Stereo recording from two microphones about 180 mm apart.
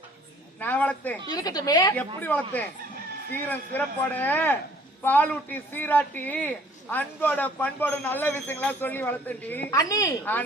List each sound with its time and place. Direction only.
0.6 s speech: 10° left (ahead or behind)
1.3 s a woman's voice: 20° left (ahead or behind)
2.2 s a woman's voice: 10° left (ahead or behind)